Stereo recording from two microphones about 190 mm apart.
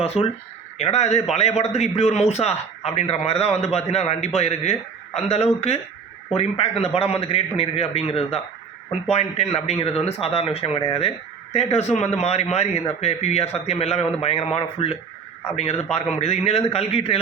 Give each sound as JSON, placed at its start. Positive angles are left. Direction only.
{"t": 0.0, "sound": "a man's voice", "side_deg": 35}